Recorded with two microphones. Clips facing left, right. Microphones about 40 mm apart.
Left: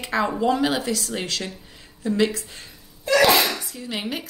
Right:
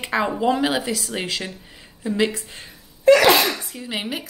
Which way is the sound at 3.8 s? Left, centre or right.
Centre.